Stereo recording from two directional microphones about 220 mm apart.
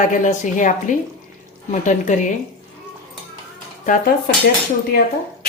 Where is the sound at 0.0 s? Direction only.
35° left (ahead or behind).